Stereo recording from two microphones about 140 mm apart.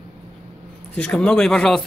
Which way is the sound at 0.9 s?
10° left (ahead or behind).